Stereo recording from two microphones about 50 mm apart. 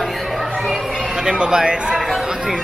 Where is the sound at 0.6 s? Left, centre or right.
Centre.